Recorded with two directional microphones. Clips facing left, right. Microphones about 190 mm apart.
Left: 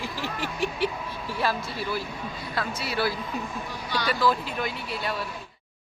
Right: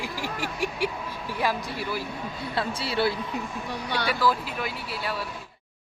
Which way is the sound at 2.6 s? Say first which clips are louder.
Right 2 dB; 30° right (ahead or behind).